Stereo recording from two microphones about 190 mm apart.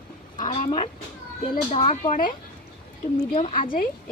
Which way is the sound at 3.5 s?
45° left (ahead or behind).